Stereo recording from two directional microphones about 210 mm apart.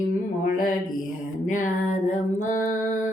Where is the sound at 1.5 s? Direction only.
35° left (ahead or behind).